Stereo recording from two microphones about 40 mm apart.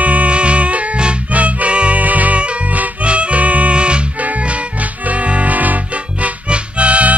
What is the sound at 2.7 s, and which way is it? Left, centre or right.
Music, right.